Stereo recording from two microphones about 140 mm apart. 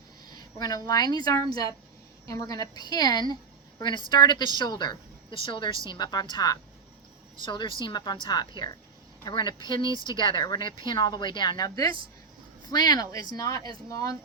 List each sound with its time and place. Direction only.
0.3 s a woman's voice: 30° left (ahead or behind)